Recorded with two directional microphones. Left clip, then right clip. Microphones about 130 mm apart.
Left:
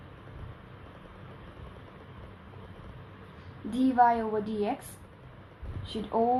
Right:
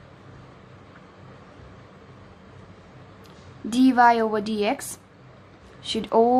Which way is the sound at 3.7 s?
70° right (ahead or behind).